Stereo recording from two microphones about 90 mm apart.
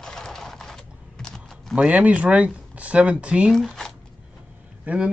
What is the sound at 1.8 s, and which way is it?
Speech, 15° right (ahead or behind).